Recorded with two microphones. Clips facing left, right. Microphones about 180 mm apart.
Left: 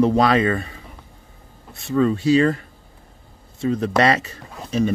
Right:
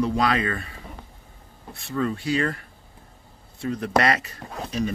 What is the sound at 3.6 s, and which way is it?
Speech, 25° left (ahead or behind).